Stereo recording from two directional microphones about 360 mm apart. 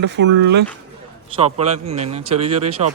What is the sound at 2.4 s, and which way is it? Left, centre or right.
Speech, right.